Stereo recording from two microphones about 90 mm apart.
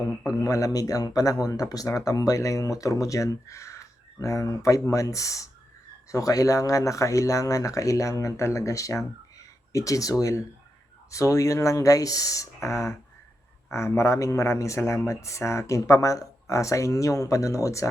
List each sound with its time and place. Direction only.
0.4 s a man's voice: 40° left (ahead or behind)